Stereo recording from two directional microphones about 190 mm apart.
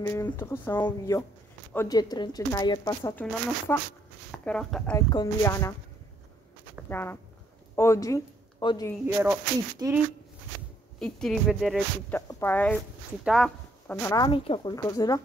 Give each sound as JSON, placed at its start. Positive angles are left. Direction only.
{"t": 0.0, "sound": "speech", "side_deg": 15}
{"t": 4.3, "sound": "speech", "side_deg": 5}
{"t": 4.9, "sound": "speech", "side_deg": 20}
{"t": 6.9, "sound": "speech", "side_deg": 10}
{"t": 9.0, "sound": "speech", "side_deg": -10}
{"t": 11.0, "sound": "speech", "side_deg": 5}
{"t": 12.1, "sound": "speech", "side_deg": 10}
{"t": 13.2, "sound": "speech", "side_deg": -5}
{"t": 13.8, "sound": "speech", "side_deg": 15}